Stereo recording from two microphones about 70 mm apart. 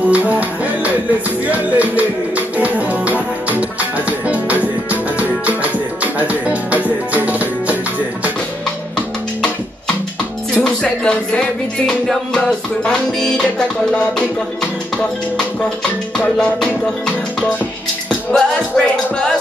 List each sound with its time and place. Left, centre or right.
0.1 s music: right
6.1 s music: right
8.9 s music: centre
16.2 s music: centre
18.3 s music: centre